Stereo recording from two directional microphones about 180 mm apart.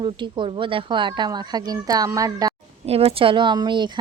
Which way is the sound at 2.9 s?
35° right (ahead or behind).